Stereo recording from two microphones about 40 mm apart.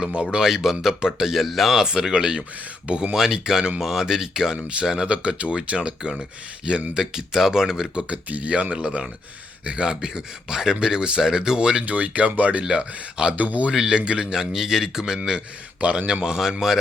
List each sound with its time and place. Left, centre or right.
0.0 s speech: right
0.4 s speech: centre; by 3.2 s right
3.2 s speech: centre
7.9 s speech: right
9.9 s speech: centre
11.9 s speech: right
13.3 s speech: right
13.7 s speech: centre
14.3 s speech: centre
16.2 s speech: centre